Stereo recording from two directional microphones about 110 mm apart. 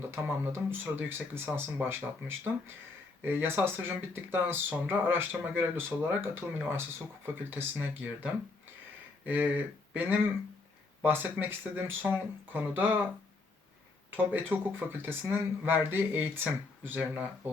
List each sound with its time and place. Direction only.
0.1 s speech: 20° right (ahead or behind)
14.1 s speech: 15° right (ahead or behind)